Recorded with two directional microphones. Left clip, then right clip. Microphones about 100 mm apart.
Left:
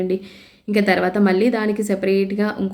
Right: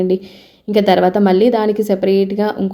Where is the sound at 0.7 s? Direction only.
35° right (ahead or behind).